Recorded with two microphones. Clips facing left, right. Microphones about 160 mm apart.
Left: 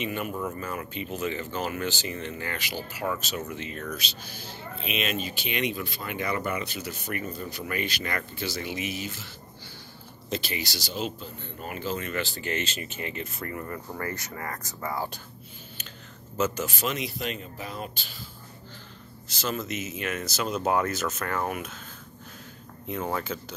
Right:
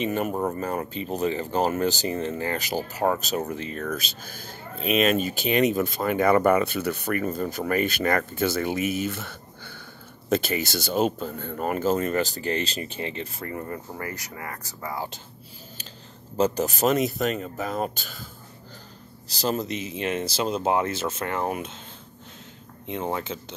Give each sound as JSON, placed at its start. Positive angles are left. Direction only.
{"t": 0.0, "sound": "speech", "side_deg": -40}
{"t": 14.1, "sound": "speech", "side_deg": -15}
{"t": 16.3, "sound": "speech", "side_deg": -35}
{"t": 19.2, "sound": "speech", "side_deg": -35}
{"t": 22.8, "sound": "speech", "side_deg": -25}